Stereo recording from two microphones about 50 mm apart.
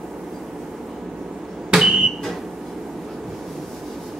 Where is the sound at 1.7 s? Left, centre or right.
Centre.